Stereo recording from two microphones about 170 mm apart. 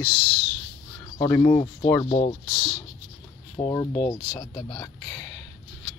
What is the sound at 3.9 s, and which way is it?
Speech, 35° left (ahead or behind).